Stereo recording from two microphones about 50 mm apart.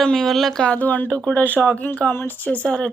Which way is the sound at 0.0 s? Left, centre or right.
Centre.